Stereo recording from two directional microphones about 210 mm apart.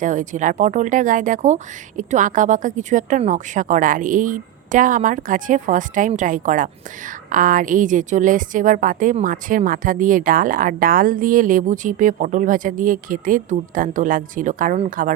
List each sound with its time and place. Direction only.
0.0 s a woman's voice: 35° right (ahead or behind)